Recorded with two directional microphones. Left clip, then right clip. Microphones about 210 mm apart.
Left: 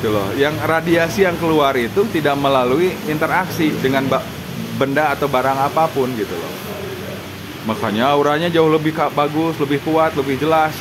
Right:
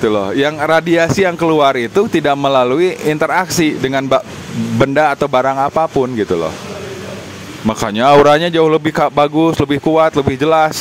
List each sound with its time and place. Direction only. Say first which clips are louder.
0.1 s speech: right 3 dB; 50° right (ahead or behind)
7.6 s speech: right 5 dB; 50° right (ahead or behind)